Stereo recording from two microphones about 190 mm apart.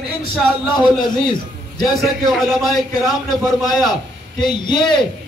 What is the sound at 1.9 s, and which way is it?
A man's voice, centre (ahead or behind).